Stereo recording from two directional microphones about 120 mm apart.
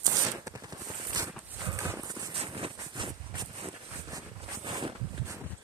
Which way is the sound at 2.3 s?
50° right (ahead or behind).